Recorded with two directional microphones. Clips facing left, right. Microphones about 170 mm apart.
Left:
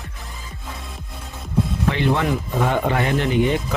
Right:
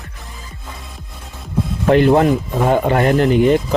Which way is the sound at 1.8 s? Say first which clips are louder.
Right 11 dB; 45° right (ahead or behind).